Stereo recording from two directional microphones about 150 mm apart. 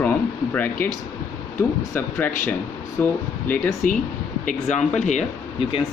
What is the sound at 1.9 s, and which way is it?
Speech, 15° left (ahead or behind).